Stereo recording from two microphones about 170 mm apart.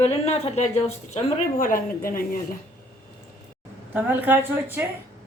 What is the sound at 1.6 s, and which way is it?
Speech, 55° left (ahead or behind).